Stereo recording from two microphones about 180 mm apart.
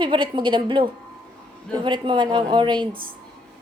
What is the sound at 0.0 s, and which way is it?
Speech, 25° right (ahead or behind).